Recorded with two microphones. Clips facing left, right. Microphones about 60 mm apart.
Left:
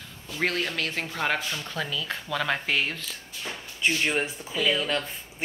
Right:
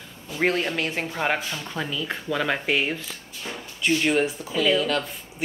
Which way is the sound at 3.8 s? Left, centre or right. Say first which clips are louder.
Right 3 dB; left.